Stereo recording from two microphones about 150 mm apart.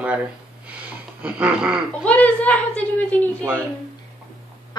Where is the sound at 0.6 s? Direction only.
10° right (ahead or behind).